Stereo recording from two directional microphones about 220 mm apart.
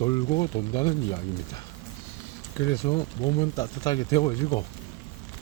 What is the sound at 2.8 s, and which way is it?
Speech, 25° left (ahead or behind).